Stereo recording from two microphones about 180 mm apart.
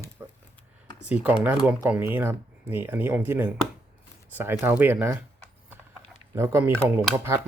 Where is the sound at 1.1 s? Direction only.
5° right (ahead or behind).